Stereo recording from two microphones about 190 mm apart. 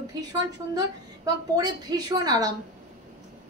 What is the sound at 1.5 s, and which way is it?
Speech, 20° right (ahead or behind).